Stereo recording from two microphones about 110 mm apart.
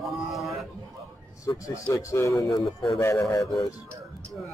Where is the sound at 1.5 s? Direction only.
30° left (ahead or behind).